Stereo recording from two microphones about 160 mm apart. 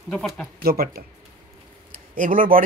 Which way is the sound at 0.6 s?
75° right (ahead or behind).